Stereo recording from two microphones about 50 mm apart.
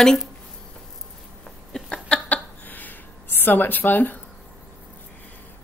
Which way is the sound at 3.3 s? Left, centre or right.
Left.